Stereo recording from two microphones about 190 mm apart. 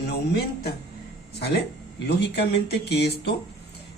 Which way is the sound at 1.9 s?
60° left (ahead or behind).